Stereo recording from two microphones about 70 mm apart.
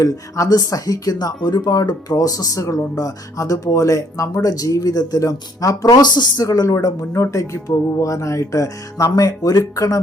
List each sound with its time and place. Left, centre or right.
0.0 s speech: left
4.4 s speech: left
5.9 s speech: left